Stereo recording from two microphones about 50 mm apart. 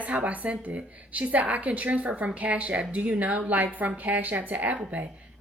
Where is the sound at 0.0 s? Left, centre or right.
Right.